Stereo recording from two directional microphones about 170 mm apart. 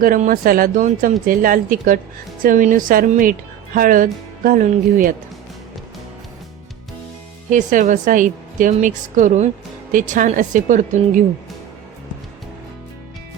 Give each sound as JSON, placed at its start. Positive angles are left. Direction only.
{"t": 0.0, "sound": "a woman's voice", "side_deg": -55}
{"t": 7.5, "sound": "a woman's voice", "side_deg": -50}